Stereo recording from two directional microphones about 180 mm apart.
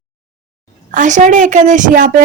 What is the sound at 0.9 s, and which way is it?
Speech, 45° right (ahead or behind).